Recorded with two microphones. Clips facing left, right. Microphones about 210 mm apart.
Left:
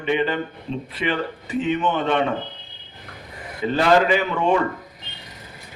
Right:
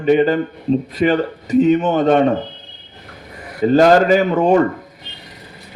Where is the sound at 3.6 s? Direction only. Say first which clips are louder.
Right 7 dB; 40° right (ahead or behind).